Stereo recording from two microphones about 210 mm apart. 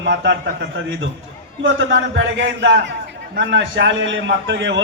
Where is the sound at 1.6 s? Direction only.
65° right (ahead or behind).